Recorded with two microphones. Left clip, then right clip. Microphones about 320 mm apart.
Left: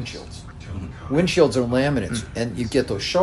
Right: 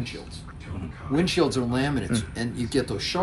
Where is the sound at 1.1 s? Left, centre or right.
Left.